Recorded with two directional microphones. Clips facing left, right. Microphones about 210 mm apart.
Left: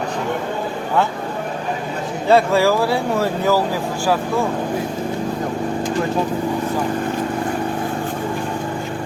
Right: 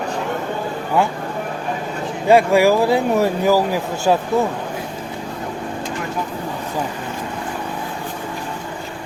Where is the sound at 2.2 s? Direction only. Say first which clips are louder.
Right 2 dB; 15° right (ahead or behind).